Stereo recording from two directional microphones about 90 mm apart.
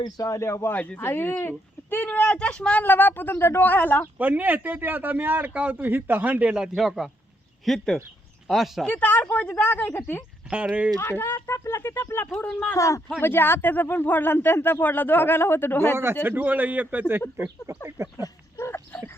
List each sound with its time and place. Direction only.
0.0 s a man's voice: 40° left (ahead or behind); by 4.1 s 20° left (ahead or behind)
4.2 s speech: 20° right (ahead or behind); by 8.9 s centre (ahead or behind)
8.9 s speech: 20° left (ahead or behind)
10.5 s speech: 15° right (ahead or behind)
11.0 s speech: 25° left (ahead or behind)
12.3 s speech: 10° left (ahead or behind)
12.7 s a man's voice: 35° left (ahead or behind)
16.2 s speech: 20° right (ahead or behind)
18.5 s a sound: 25° left (ahead or behind)